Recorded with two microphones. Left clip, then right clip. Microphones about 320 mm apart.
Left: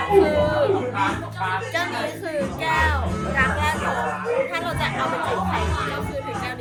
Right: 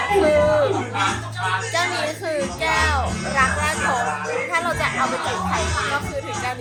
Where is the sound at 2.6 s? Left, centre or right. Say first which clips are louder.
Right 2 dB; centre.